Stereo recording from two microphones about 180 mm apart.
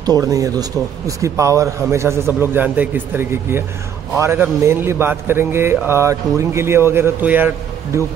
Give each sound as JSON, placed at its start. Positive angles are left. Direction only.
{"t": 0.0, "sound": "a man's voice", "side_deg": -20}